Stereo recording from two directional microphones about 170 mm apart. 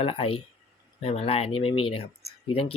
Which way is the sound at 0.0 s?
35° left (ahead or behind).